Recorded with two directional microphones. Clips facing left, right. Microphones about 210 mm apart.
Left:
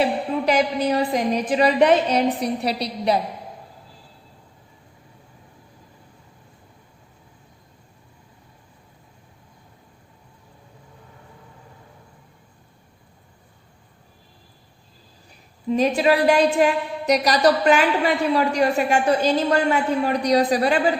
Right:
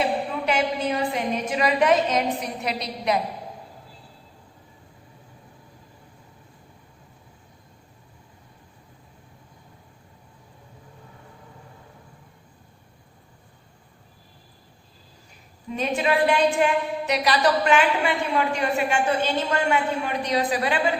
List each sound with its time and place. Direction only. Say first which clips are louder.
0.0 s a woman's voice: left 4 dB; 35° left (ahead or behind)
15.7 s a woman's voice: left 5 dB; 35° left (ahead or behind)